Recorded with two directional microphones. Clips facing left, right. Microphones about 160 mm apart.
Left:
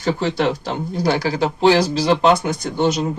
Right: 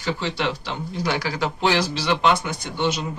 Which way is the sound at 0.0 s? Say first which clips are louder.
Left 6 dB; 45° left (ahead or behind).